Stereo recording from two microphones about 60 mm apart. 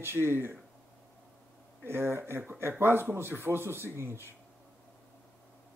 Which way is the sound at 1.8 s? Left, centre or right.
Right.